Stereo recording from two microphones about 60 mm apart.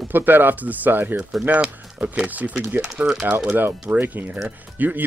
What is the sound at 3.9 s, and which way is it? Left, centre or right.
Speech, right.